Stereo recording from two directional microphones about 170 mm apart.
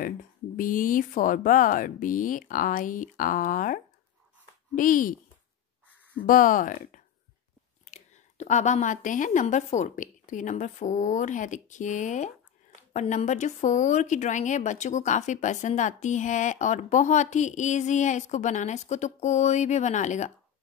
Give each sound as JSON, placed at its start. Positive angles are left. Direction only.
{"t": 0.0, "sound": "a woman's voice", "side_deg": 55}
{"t": 6.2, "sound": "a woman's voice", "side_deg": 55}